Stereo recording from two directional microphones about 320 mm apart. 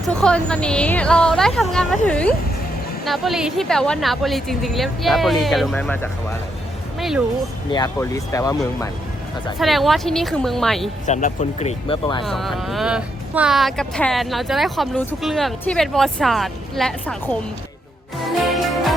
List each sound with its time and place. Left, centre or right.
0.0 s speech: centre
7.7 s speech: centre
11.0 s speech: left
12.2 s speech: centre
18.2 s music: centre